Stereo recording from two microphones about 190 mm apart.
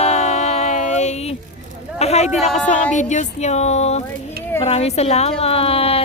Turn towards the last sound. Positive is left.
turn(degrees=30)  # may be behind; listen again after turning